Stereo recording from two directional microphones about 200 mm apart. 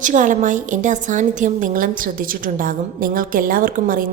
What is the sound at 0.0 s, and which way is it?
A woman's voice, 40° right (ahead or behind).